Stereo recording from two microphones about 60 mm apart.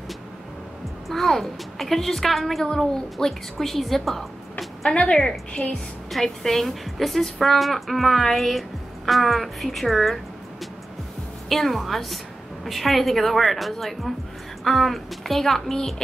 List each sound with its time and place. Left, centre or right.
1.0 s a woman's voice: centre
4.9 s a woman's voice: centre
6.1 s a woman's voice: centre
11.4 s a woman's voice: centre